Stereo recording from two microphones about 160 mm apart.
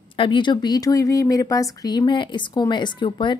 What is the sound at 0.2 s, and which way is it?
A woman's voice, 30° left (ahead or behind).